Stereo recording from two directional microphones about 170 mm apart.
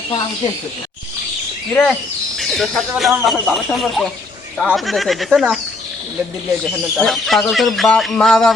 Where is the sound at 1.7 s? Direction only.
10° left (ahead or behind).